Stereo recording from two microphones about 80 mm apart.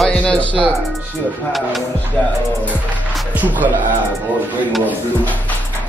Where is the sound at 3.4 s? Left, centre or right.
Right.